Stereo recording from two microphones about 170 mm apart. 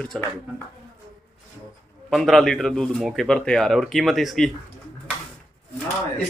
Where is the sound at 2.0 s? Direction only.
Centre (ahead or behind).